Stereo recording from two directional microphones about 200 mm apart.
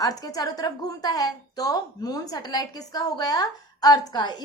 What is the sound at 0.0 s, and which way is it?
A woman's voice, 15° left (ahead or behind).